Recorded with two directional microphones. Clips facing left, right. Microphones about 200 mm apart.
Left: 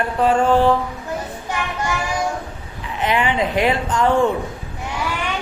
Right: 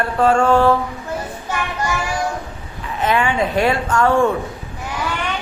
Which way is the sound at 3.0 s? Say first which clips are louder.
Right 1 dB; 15° left (ahead or behind).